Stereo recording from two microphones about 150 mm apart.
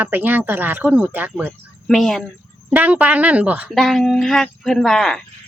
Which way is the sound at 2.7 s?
10° right (ahead or behind).